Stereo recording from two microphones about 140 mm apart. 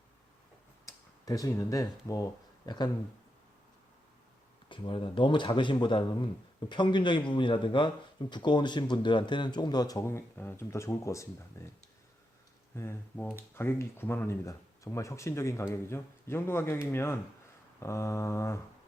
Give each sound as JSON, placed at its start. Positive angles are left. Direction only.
{"t": 0.9, "sound": "speech", "side_deg": 25}
{"t": 4.7, "sound": "speech", "side_deg": 35}
{"t": 12.7, "sound": "speech", "side_deg": 15}